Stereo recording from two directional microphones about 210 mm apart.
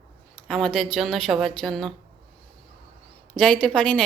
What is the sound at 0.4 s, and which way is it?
A woman's voice, centre (ahead or behind).